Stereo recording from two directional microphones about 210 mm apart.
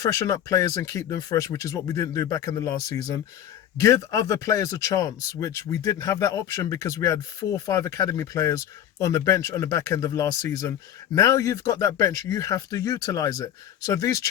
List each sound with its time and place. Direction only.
0.0 s speech: 15° left (ahead or behind)